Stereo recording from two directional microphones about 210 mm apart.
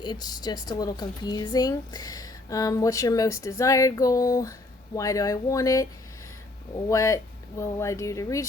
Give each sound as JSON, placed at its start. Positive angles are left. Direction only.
{"t": 0.0, "sound": "a woman's voice", "side_deg": 20}